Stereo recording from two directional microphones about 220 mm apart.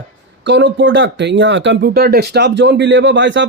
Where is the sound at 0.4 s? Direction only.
55° right (ahead or behind).